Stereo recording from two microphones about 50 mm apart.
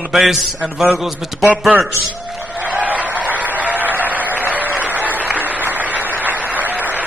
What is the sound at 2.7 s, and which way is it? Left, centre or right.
Applause, right.